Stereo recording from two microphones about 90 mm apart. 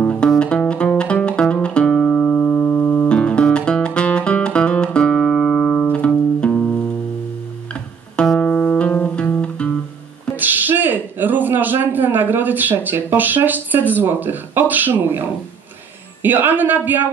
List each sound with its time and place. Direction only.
0.0 s music: 15° left (ahead or behind)
8.2 s music: 10° left (ahead or behind)
10.3 s a sound: 20° right (ahead or behind)
16.2 s speech: 20° right (ahead or behind)